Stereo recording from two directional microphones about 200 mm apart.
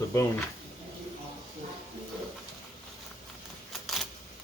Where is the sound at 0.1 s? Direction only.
15° left (ahead or behind).